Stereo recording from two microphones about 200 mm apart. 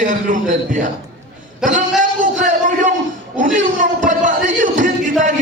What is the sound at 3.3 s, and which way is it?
Speech, 40° right (ahead or behind).